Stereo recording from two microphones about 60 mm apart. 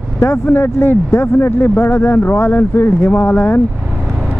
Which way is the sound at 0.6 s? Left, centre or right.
Left.